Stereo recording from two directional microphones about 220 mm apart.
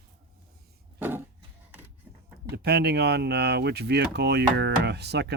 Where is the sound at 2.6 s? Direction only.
45° right (ahead or behind).